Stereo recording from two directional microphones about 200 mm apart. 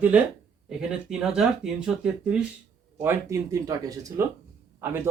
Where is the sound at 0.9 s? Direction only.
5° right (ahead or behind).